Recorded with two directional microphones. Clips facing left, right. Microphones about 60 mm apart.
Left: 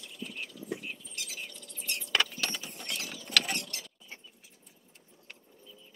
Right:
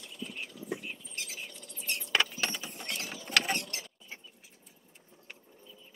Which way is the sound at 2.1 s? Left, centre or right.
Right.